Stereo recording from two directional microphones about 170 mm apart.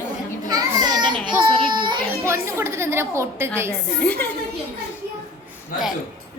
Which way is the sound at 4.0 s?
10° left (ahead or behind).